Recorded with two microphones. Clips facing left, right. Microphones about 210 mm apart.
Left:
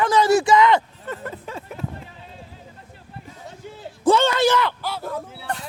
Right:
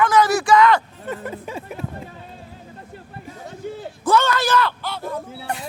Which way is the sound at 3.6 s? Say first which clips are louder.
Right 10 dB; 55° right (ahead or behind).